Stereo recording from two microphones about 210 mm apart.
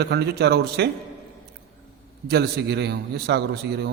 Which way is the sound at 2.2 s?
50° right (ahead or behind).